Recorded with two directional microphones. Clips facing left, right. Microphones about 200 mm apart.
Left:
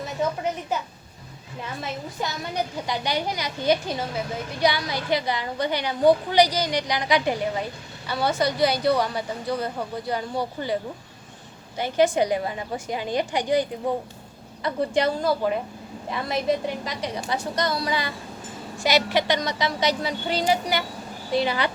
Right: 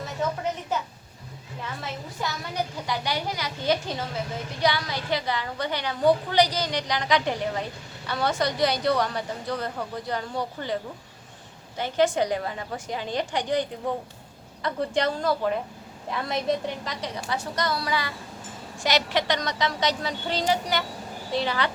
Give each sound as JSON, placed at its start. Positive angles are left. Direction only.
{"t": 0.2, "sound": "a sound", "side_deg": 10}
{"t": 2.2, "sound": "a woman's voice", "side_deg": 20}
{"t": 11.8, "sound": "a woman's voice", "side_deg": 10}
{"t": 18.8, "sound": "a woman's voice", "side_deg": 10}